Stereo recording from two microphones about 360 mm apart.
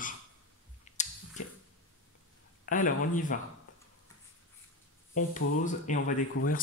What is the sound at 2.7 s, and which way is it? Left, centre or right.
Speech, left.